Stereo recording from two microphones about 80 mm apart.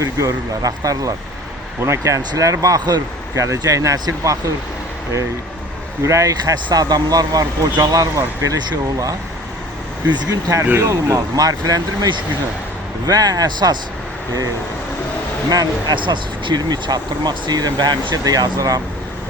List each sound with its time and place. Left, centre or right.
0.0 s speech: right
6.0 s speech: right
6.4 s speech: right
10.1 s speech: right
10.5 s speech: right
13.1 s speech: right
15.4 s speech: right
16.0 s speech: right